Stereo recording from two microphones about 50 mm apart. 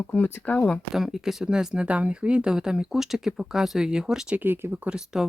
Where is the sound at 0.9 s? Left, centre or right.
Centre.